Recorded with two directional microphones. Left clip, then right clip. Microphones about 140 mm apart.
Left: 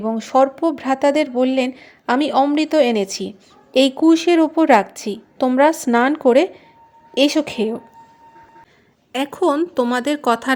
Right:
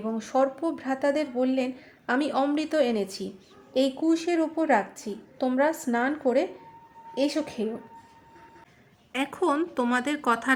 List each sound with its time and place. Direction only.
0.0 s speech: 45° left (ahead or behind)
9.1 s speech: 50° left (ahead or behind)